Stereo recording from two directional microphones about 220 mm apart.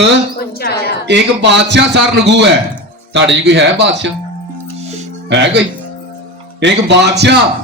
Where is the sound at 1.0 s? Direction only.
50° right (ahead or behind).